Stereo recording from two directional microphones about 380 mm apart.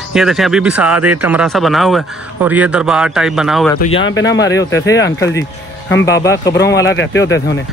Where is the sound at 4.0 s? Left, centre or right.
Left.